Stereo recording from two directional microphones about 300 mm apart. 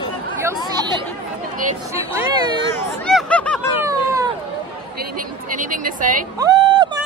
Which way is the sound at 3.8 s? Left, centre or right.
Centre.